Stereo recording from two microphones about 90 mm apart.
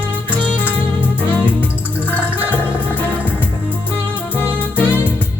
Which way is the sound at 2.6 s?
20° left (ahead or behind).